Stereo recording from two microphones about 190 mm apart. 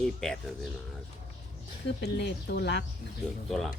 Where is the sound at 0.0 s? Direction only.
Centre (ahead or behind).